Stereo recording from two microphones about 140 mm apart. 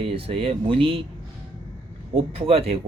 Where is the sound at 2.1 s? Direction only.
45° right (ahead or behind).